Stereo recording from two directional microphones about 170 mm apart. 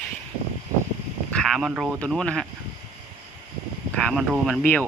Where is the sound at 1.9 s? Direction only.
5° left (ahead or behind).